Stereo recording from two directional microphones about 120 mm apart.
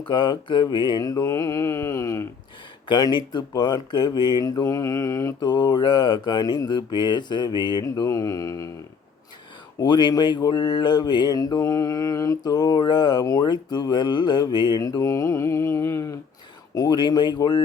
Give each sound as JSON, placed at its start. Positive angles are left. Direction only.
{"t": 0.0, "sound": "mantra", "side_deg": 40}
{"t": 2.9, "sound": "mantra", "side_deg": 40}
{"t": 9.8, "sound": "mantra", "side_deg": 40}
{"t": 16.7, "sound": "mantra", "side_deg": 35}